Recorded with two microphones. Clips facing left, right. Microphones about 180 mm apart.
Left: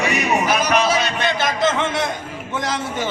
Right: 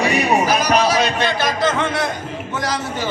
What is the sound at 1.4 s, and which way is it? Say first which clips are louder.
Speech: left 1 dB; 25° left (ahead or behind).